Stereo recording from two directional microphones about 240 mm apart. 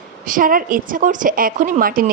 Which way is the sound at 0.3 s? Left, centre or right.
Right.